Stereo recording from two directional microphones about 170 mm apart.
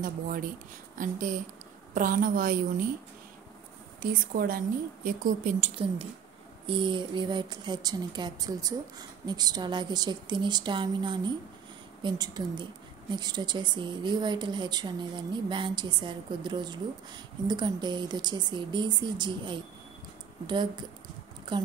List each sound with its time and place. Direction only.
0.0 s a woman's voice: 55° right (ahead or behind)
4.0 s a woman's voice: 60° right (ahead or behind)
6.6 s a woman's voice: 30° right (ahead or behind)